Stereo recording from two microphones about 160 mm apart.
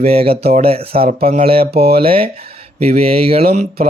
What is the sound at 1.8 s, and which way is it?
Speech, 75° right (ahead or behind).